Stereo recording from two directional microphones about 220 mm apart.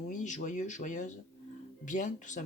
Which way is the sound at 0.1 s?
35° left (ahead or behind).